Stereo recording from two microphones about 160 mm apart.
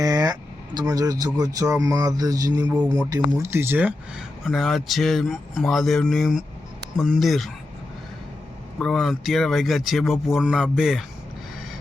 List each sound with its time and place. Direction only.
0.0 s speech: 25° right (ahead or behind)
2.6 s speech: 5° right (ahead or behind)
3.1 s speech: 20° right (ahead or behind)
4.4 s speech: centre (ahead or behind)
8.8 s speech: centre (ahead or behind)